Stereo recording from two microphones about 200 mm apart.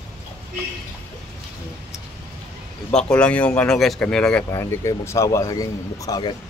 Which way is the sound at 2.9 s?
5° left (ahead or behind).